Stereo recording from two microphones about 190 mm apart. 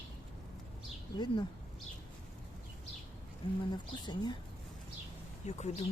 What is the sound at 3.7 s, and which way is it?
Speech, 25° left (ahead or behind).